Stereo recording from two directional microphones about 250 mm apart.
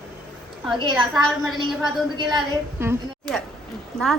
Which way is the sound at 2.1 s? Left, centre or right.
Centre.